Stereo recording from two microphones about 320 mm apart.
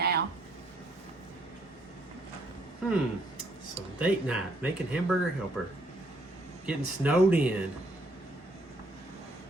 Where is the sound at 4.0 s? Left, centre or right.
Centre.